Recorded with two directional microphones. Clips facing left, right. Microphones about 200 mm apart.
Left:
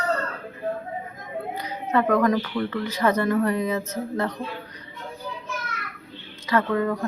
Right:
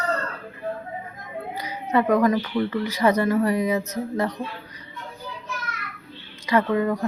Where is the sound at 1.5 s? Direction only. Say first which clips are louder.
Right 1 dB; 10° right (ahead or behind).